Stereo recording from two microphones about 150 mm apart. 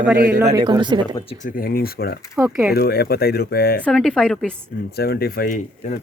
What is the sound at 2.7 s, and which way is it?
Speech, 90° left.